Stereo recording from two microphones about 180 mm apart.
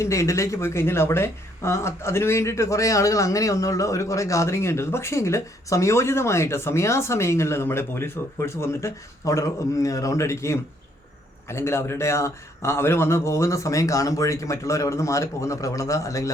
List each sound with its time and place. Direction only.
0.0 s speech: 15° left (ahead or behind)